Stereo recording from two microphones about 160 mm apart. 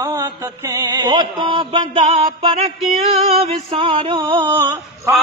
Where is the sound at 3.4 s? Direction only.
35° right (ahead or behind).